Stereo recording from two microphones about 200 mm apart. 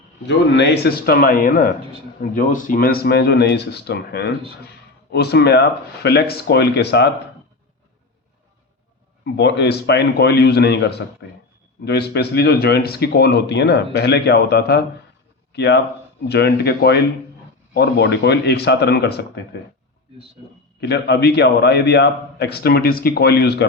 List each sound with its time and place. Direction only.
0.3 s a man's voice: 60° left (ahead or behind)
9.2 s a man's voice: 60° left (ahead or behind)
20.8 s speech: 55° left (ahead or behind)